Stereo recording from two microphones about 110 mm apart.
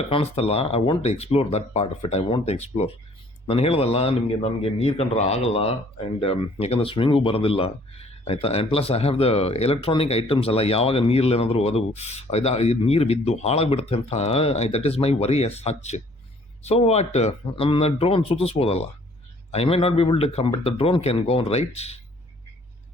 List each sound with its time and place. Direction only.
0.1 s speech: 60° left (ahead or behind)
3.4 s speech: 60° left (ahead or behind); by 16.0 s 80° left
16.6 s speech: 70° left (ahead or behind)
17.5 s speech: 55° left (ahead or behind)